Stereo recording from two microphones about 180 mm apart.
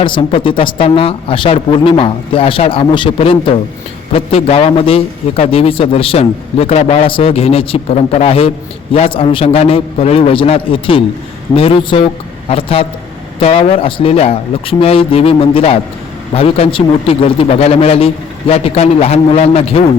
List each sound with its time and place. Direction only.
0.0 s a man's voice: 30° left (ahead or behind)